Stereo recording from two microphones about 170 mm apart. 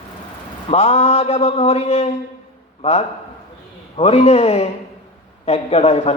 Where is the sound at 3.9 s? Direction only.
40° left (ahead or behind).